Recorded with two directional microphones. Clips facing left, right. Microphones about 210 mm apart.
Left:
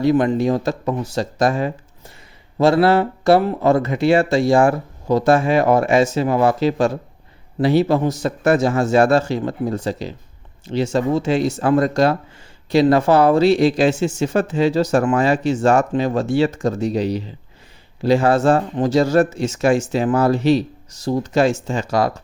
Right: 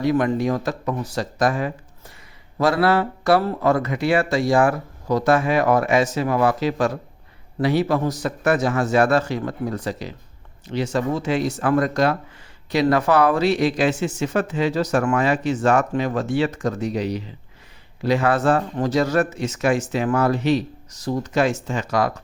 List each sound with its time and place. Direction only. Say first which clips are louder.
0.0 s speech: left 4 dB; 30° left (ahead or behind)